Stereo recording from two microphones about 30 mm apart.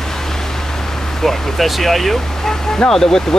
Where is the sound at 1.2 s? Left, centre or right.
Centre.